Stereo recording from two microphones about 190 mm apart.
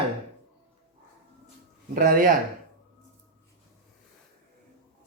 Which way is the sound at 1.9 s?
45° right (ahead or behind).